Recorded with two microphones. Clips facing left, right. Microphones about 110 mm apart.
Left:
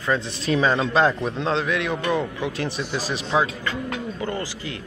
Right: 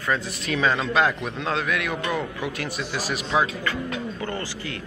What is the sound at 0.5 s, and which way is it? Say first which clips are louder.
A man's voice: left 3 dB; 30° left (ahead or behind).